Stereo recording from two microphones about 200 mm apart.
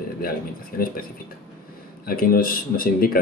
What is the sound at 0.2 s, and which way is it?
Speech, 45° left (ahead or behind).